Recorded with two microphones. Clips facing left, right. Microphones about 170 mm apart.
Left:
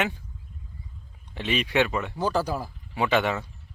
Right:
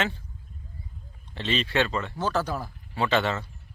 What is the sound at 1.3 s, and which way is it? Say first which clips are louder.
Speech: left 2 dB; 10° left (ahead or behind).